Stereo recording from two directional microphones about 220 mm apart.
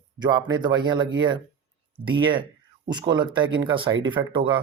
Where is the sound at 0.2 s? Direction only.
20° right (ahead or behind).